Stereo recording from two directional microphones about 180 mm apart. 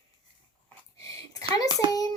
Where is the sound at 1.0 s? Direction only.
20° left (ahead or behind).